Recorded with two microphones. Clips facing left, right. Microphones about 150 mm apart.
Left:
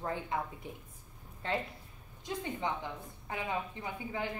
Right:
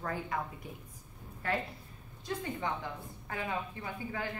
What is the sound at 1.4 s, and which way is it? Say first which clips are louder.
Speech: right 1 dB; 25° left (ahead or behind).